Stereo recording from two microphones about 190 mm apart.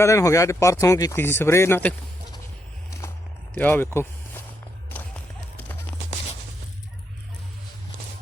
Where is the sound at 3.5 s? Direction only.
10° left (ahead or behind).